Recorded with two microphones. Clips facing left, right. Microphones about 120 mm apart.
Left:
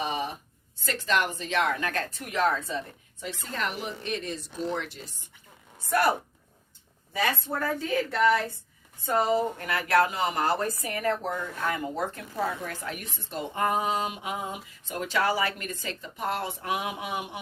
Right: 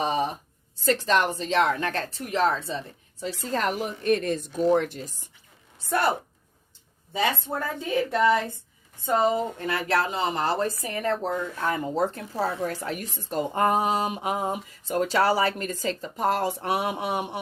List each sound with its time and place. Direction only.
0.0 s a sound: 35° right (ahead or behind)
0.8 s speech: 35° right (ahead or behind)
5.8 s a woman's voice: 25° right (ahead or behind)